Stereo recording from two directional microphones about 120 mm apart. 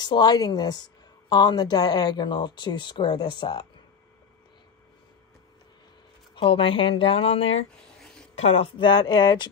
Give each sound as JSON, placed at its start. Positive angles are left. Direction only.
{"t": 0.0, "sound": "speech", "side_deg": 35}
{"t": 6.3, "sound": "speech", "side_deg": 50}
{"t": 8.0, "sound": "a sound", "side_deg": 5}
{"t": 8.4, "sound": "speech", "side_deg": 55}